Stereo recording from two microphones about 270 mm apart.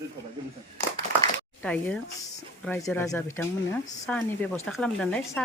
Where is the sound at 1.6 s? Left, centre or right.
Centre.